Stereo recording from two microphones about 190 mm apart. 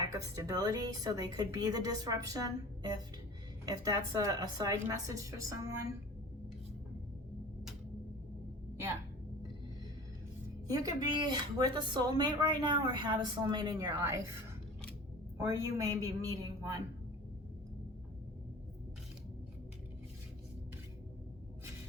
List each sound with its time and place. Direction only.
0.1 s speech: 20° right (ahead or behind)
10.7 s speech: 20° right (ahead or behind)
15.4 s speech: 15° right (ahead or behind)